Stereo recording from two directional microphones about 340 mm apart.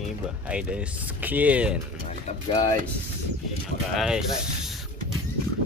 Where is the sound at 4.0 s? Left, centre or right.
Centre.